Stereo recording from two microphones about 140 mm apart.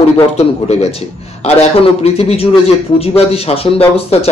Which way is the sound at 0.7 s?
50° left (ahead or behind).